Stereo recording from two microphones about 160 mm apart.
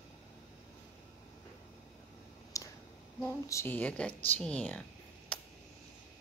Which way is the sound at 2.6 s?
20° left (ahead or behind).